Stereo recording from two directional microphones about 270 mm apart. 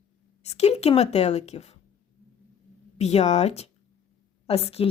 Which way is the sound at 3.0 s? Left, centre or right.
Left.